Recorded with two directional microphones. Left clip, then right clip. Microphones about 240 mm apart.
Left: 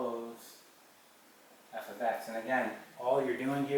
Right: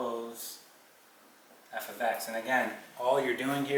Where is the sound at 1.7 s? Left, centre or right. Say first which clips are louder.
Right 2 dB; centre.